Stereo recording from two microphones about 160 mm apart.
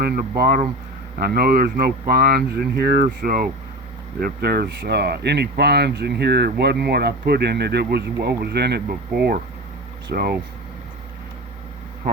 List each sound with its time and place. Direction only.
0.0 s speech: 75° right (ahead or behind)